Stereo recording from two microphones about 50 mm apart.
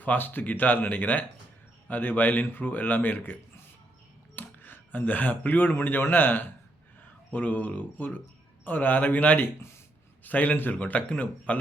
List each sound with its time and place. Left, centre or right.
0.0 s a man's voice: left
4.4 s a man's voice: left